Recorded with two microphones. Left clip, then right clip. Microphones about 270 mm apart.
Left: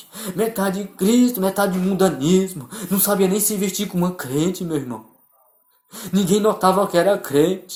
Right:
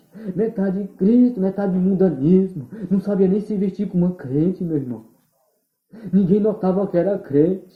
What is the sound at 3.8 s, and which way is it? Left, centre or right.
Speech, left.